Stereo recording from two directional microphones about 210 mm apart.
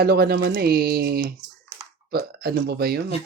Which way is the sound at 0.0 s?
45° right (ahead or behind).